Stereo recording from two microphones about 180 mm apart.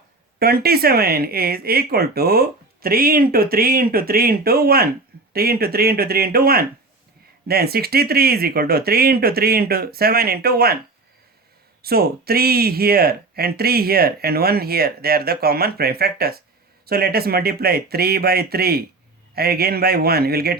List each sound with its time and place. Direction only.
0.3 s speech: 60° right (ahead or behind)
11.8 s speech: 60° right (ahead or behind)